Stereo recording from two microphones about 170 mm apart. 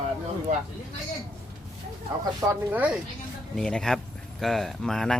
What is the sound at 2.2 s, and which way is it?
Speech, 20° right (ahead or behind).